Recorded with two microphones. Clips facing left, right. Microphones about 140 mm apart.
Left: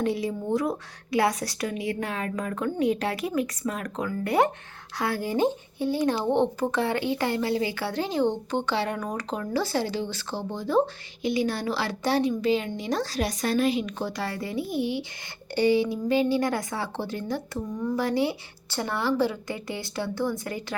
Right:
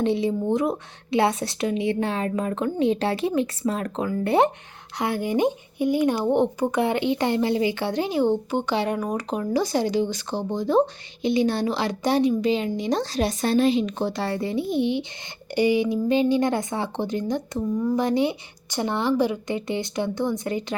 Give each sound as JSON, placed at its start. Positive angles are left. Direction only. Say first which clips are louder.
{"t": 0.0, "sound": "speech", "louder": "right 5 dB", "side_deg": -25}